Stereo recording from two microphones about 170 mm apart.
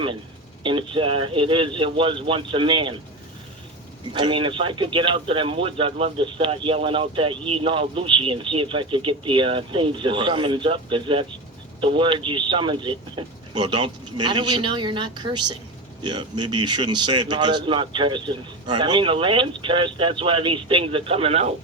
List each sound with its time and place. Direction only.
0.6 s speech: 30° right (ahead or behind)
4.1 s speech: 30° right (ahead or behind)